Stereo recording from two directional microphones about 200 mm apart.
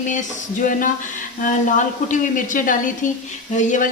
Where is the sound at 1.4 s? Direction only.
40° left (ahead or behind).